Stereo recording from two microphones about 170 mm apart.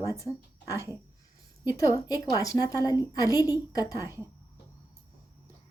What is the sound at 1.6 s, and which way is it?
A woman's voice, 20° left (ahead or behind).